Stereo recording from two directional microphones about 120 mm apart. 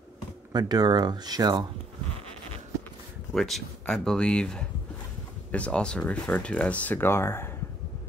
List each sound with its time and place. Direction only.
0.5 s speech: 35° right (ahead or behind)
3.3 s speech: centre (ahead or behind); by 7.5 s 20° left (ahead or behind)